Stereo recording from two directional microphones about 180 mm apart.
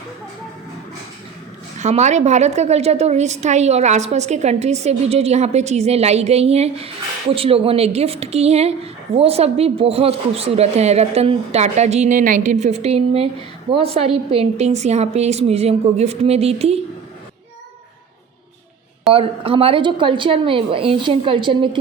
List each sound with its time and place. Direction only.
1.8 s a woman's voice: 40° right (ahead or behind)
19.1 s a woman's voice: 30° right (ahead or behind)